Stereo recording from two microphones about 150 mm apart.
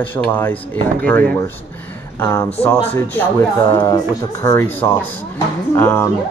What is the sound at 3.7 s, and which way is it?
Speech, 25° left (ahead or behind).